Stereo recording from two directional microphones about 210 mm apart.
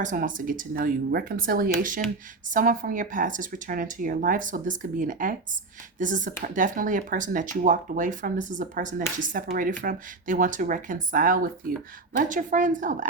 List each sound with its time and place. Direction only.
0.0 s speech: 40° right (ahead or behind)